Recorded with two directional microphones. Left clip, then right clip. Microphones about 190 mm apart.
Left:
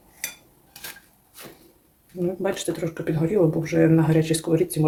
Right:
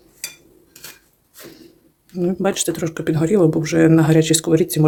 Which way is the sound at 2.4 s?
45° right (ahead or behind).